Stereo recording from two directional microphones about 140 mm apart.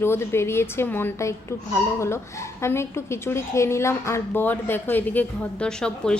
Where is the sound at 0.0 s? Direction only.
20° left (ahead or behind).